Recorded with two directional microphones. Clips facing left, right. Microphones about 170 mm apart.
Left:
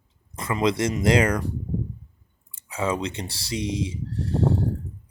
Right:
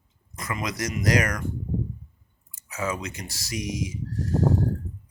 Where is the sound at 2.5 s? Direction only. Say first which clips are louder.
Left 4 dB; 30° left (ahead or behind).